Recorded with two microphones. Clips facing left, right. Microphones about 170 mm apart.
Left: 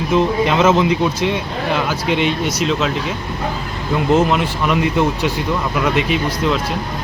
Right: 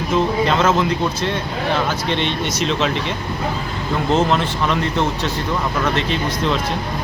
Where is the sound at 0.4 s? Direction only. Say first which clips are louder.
Left 3 dB; 15° left (ahead or behind).